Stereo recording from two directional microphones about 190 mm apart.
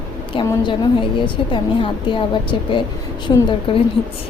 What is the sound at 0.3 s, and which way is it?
A woman's voice, 25° left (ahead or behind).